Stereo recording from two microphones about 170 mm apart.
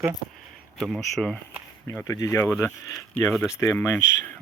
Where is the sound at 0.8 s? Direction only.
Centre (ahead or behind).